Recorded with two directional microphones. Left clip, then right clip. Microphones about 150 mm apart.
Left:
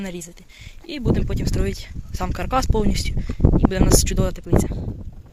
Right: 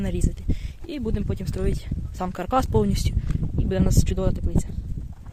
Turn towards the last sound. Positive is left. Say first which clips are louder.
# left 6 dB
turn(degrees=0)  # may be behind; listen again after turning